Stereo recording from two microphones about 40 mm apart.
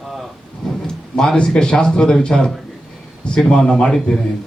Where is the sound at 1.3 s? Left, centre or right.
Left.